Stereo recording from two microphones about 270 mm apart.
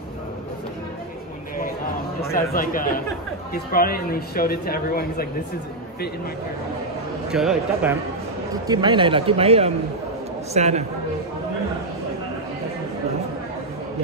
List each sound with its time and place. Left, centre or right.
2.3 s speech: left
7.2 s speech: centre
8.6 s speech: centre